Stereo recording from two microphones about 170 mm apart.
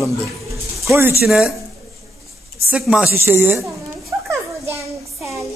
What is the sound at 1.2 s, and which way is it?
Speech, centre (ahead or behind).